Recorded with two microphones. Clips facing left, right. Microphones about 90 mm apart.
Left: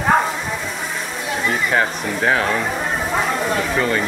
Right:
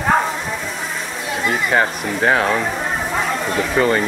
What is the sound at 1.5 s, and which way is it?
Speech, 5° right (ahead or behind).